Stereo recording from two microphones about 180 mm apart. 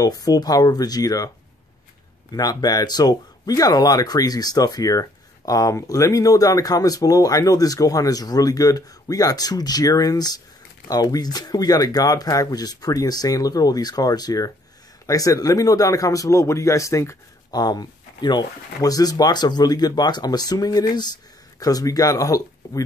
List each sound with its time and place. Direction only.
0.0 s speech: 20° left (ahead or behind)
2.3 s speech: 20° left (ahead or behind)